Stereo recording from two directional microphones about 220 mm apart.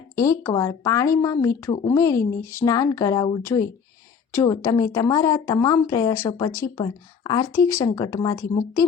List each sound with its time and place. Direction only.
0.2 s speech: 15° left (ahead or behind)